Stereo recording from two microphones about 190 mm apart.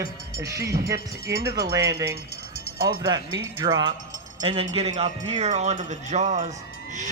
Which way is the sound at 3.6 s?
25° right (ahead or behind).